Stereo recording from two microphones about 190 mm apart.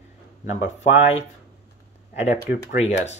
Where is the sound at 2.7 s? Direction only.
35° left (ahead or behind).